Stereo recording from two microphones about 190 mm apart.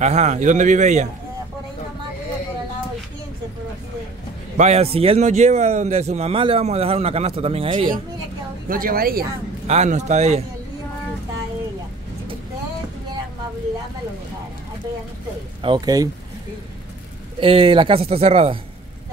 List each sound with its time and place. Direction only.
0.0 s a man's voice: 35° right (ahead or behind)
4.6 s a man's voice: 35° right (ahead or behind)
8.6 s a woman's voice: 50° right (ahead or behind)
9.7 s a man's voice: 35° right (ahead or behind)
15.6 s speech: 20° right (ahead or behind)
17.4 s speech: 30° right (ahead or behind)